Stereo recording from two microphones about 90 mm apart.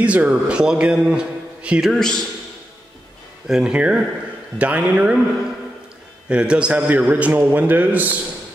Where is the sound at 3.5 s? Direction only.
10° right (ahead or behind).